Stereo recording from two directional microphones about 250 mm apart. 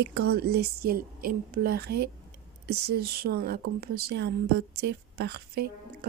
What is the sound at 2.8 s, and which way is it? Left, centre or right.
A woman's voice, right.